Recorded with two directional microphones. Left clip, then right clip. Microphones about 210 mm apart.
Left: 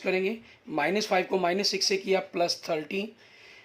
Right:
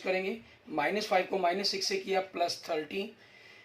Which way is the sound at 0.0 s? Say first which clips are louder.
Left 4 dB; 55° left (ahead or behind).